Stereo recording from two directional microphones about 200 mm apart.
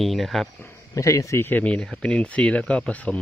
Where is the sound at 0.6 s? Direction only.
15° left (ahead or behind).